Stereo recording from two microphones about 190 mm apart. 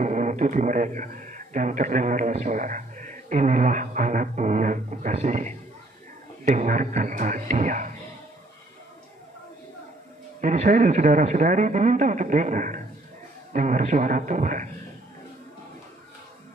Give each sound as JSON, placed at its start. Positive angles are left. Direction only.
{"t": 0.0, "sound": "a man's voice", "side_deg": -40}
{"t": 10.4, "sound": "speech", "side_deg": -40}